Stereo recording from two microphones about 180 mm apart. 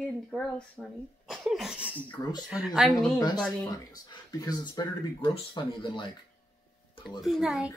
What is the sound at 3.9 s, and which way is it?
Speech, 20° left (ahead or behind).